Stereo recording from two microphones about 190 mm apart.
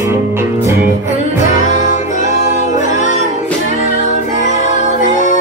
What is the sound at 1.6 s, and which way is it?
Music, 40° left (ahead or behind).